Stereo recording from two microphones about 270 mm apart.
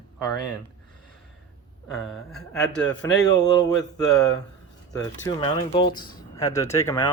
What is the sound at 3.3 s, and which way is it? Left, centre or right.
Speech, centre.